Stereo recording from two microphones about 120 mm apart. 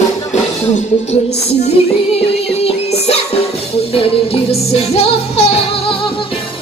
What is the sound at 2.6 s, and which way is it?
Music, 60° left (ahead or behind).